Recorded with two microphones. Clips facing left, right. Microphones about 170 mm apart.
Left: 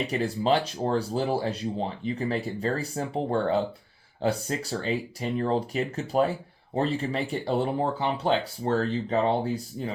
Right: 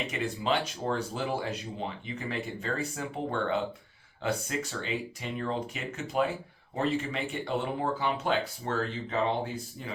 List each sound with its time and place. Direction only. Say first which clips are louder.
0.1 s speech: left 6 dB; 35° left (ahead or behind)